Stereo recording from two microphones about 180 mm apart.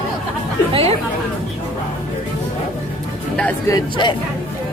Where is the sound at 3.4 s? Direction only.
20° left (ahead or behind).